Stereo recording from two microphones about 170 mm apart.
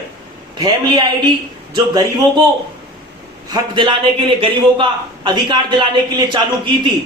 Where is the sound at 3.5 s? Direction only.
25° right (ahead or behind).